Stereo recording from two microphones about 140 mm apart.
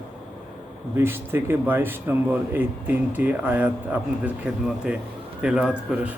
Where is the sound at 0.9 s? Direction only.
15° right (ahead or behind).